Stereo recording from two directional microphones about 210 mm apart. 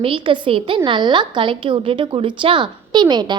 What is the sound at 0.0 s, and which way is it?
A woman's voice, 25° right (ahead or behind).